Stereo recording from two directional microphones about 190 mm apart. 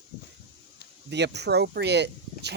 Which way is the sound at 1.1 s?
65° right (ahead or behind).